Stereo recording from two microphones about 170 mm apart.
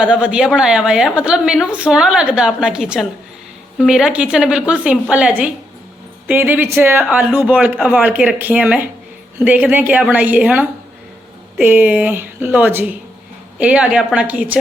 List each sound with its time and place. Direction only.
0.0 s a woman's voice: 5° right (ahead or behind)